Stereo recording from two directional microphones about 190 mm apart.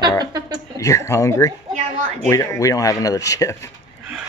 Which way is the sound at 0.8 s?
15° left (ahead or behind).